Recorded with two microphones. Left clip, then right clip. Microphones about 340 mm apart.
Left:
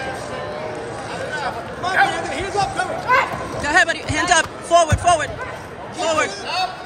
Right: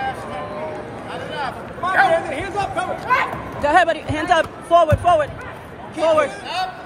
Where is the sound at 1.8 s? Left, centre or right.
Centre.